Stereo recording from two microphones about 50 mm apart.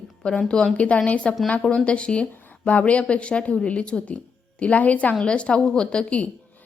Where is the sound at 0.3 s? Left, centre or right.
Centre.